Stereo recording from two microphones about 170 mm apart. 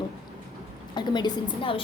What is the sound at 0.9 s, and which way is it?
Speech, 25° left (ahead or behind).